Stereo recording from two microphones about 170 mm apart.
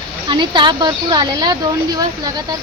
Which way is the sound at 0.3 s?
25° right (ahead or behind).